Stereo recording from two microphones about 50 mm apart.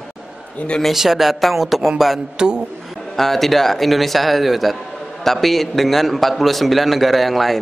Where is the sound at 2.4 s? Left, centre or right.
Centre.